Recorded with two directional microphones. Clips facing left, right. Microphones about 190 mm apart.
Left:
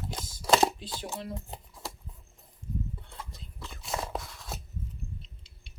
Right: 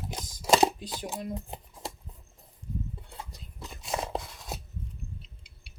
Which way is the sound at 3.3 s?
15° right (ahead or behind).